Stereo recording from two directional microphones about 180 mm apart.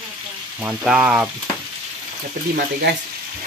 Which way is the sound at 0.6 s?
5° right (ahead or behind).